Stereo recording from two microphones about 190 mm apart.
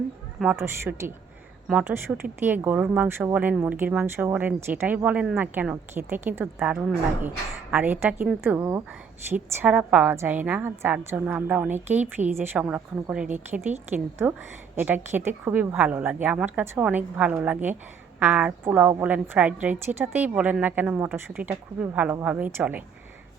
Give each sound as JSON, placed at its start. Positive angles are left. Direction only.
{"t": 0.3, "sound": "a woman's voice", "side_deg": -5}